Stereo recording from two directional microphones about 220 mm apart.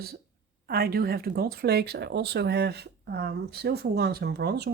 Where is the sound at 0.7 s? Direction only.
45° right (ahead or behind).